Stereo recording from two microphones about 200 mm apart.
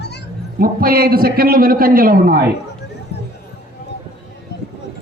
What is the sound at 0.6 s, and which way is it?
A man's voice, 45° right (ahead or behind).